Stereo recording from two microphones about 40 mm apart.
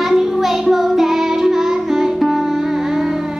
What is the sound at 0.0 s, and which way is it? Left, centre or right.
Music, centre.